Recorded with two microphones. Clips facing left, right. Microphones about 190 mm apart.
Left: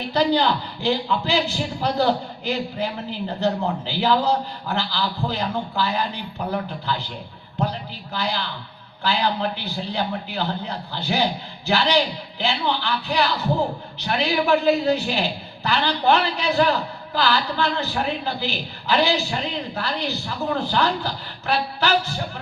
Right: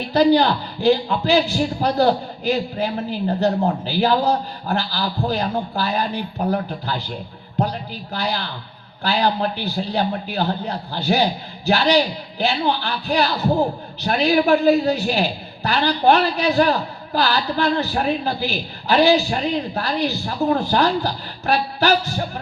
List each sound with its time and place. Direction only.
0.1 s a man's voice: 45° right (ahead or behind)
8.1 s a man's voice: 45° right (ahead or behind)